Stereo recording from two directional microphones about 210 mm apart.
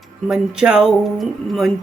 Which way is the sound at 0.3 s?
5° right (ahead or behind).